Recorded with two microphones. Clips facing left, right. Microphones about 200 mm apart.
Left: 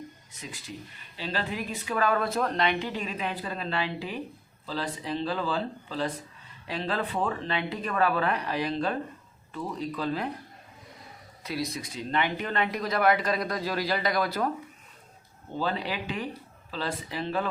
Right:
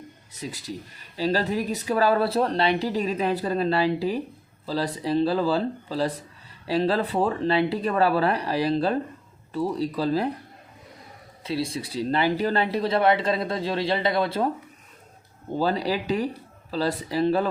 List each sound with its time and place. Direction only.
0.3 s speech: 35° right (ahead or behind)
11.4 s speech: 30° right (ahead or behind)
15.5 s speech: 40° right (ahead or behind)